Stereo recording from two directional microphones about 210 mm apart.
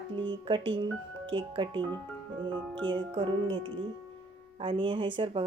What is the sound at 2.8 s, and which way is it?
Speech, 25° right (ahead or behind).